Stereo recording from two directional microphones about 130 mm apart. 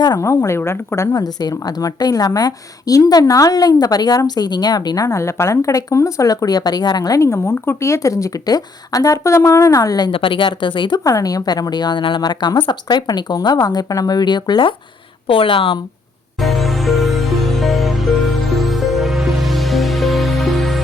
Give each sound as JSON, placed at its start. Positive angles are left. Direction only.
{"t": 0.0, "sound": "a woman's voice", "side_deg": 25}
{"t": 10.1, "sound": "a woman's voice", "side_deg": 40}
{"t": 16.4, "sound": "music", "side_deg": 0}